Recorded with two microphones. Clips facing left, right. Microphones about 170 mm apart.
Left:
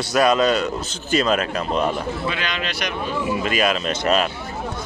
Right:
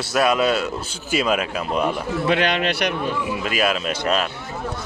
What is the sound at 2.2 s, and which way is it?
Speech, 65° right (ahead or behind).